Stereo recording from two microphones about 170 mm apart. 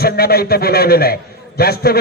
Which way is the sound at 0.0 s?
65° left (ahead or behind).